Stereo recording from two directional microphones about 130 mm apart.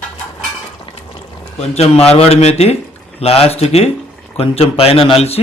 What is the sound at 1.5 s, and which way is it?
Speech, 55° left (ahead or behind).